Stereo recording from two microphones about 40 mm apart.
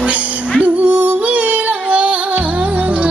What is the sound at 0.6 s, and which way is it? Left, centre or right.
Yodeling, right.